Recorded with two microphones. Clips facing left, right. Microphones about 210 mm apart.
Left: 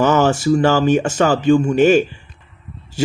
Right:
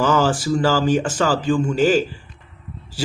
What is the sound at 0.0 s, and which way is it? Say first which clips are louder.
Speech: left 4 dB; 20° left (ahead or behind).